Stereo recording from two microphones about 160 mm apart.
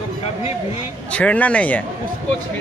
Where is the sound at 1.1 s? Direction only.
10° left (ahead or behind).